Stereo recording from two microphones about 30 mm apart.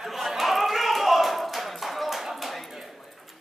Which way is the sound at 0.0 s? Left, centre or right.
Centre.